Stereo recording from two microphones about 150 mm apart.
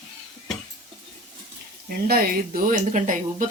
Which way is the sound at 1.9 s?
80° right.